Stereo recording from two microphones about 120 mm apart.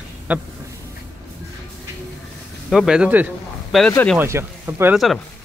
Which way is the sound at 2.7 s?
5° right (ahead or behind).